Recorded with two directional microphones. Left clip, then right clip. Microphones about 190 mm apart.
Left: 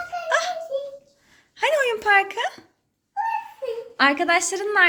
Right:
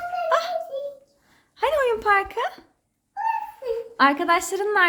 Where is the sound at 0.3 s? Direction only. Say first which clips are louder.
Even; 15° right (ahead or behind).